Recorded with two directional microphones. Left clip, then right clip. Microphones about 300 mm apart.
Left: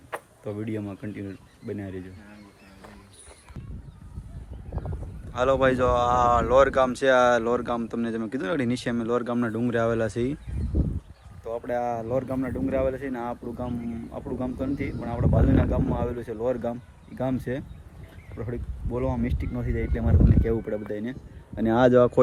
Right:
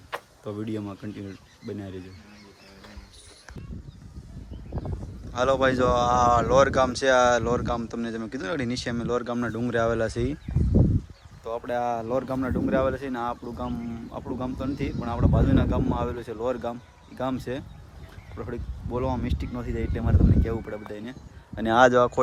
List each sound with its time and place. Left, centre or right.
0.1 s speech: centre
5.3 s speech: centre
11.4 s speech: centre
20.5 s speech: left
21.7 s speech: right